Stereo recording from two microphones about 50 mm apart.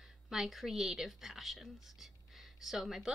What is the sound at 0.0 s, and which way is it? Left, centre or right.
A woman's voice, centre.